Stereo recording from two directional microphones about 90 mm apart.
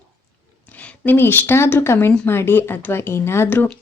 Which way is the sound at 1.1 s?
20° left (ahead or behind).